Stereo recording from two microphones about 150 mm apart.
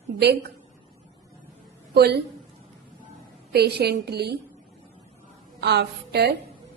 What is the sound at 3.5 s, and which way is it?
Speech, 90° right.